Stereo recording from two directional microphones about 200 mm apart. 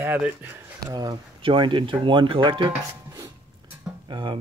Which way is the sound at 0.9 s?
20° right (ahead or behind).